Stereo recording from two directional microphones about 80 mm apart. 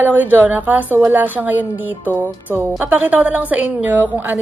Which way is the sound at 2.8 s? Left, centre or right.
Centre.